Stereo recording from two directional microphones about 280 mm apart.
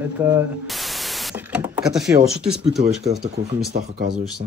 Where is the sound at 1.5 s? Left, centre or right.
Centre.